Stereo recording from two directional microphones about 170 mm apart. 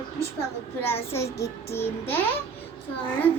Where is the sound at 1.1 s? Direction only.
15° left (ahead or behind).